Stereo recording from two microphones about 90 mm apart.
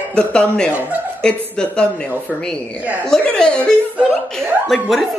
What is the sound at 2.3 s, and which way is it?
Speech, 5° right (ahead or behind).